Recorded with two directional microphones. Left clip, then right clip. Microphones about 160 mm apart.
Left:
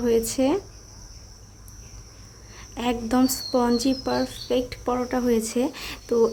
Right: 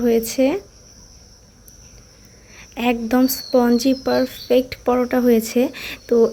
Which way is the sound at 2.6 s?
15° right (ahead or behind).